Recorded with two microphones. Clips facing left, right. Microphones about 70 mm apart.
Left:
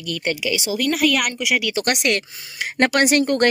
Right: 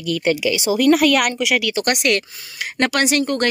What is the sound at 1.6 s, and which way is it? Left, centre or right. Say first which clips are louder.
Speech: right 2 dB; left.